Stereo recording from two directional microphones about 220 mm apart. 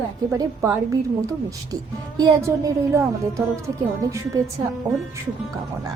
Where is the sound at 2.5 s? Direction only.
10° right (ahead or behind).